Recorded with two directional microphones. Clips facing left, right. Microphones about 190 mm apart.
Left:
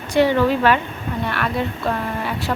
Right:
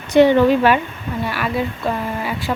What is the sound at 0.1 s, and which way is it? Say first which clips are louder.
Speech: right 5 dB; 20° right (ahead or behind).